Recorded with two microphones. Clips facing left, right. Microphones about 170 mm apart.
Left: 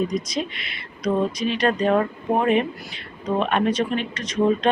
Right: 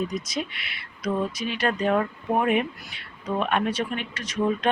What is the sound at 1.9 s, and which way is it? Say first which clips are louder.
Speech: left 3 dB; 25° left (ahead or behind).